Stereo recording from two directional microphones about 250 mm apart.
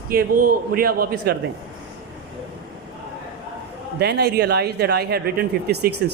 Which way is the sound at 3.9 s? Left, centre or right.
Right.